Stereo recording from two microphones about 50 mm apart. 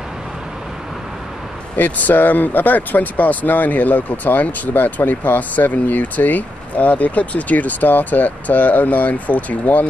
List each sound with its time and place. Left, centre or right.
1.8 s speech: left